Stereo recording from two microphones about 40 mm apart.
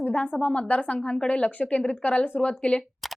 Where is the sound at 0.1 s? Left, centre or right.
Left.